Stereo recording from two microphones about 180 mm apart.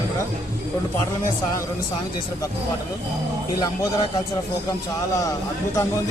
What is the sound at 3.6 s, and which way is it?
Speech, 20° left (ahead or behind).